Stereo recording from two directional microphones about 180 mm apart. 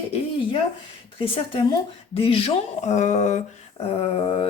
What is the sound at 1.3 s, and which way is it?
A woman's voice, 25° left (ahead or behind).